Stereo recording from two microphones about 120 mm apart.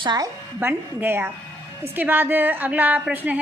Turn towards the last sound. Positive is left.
turn(degrees=-10)  # may be behind; listen again after turning